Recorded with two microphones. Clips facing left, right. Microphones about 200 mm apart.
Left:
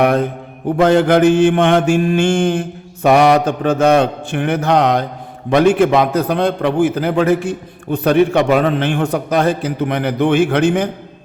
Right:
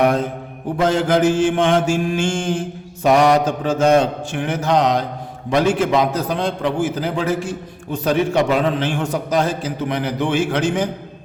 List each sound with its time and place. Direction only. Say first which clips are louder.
0.0 s a man's voice: left 3 dB; 60° left (ahead or behind)